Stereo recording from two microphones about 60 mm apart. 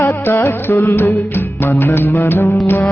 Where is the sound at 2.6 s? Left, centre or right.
Left.